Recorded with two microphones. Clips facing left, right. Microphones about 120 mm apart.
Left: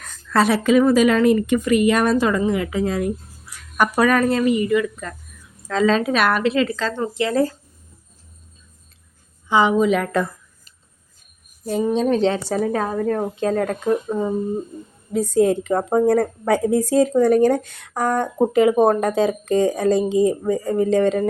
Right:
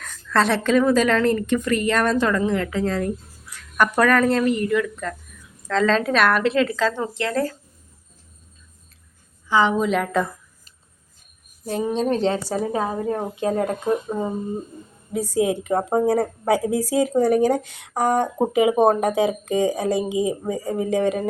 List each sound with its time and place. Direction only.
0.0 s a woman's voice: 5° left (ahead or behind)
7.1 s a woman's voice: 5° left (ahead or behind)
9.5 s a woman's voice: 15° left (ahead or behind)
9.7 s speech: centre (ahead or behind)
11.9 s a woman's voice: 35° right (ahead or behind)
12.7 s speech: 15° right (ahead or behind)
15.1 s speech: 10° right (ahead or behind)